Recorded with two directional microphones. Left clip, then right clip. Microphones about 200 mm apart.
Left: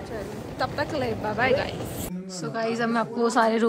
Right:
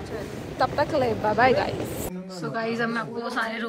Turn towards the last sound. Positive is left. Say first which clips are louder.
# left 7 dB
turn(degrees=20)  # may be behind; listen again after turning